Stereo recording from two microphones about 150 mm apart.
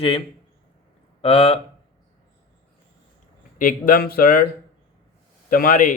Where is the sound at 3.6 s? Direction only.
65° left (ahead or behind).